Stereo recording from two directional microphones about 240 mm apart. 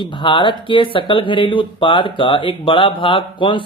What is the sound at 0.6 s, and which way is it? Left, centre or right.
Speech, left.